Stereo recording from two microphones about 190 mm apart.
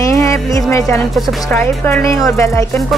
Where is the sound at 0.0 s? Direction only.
15° left (ahead or behind).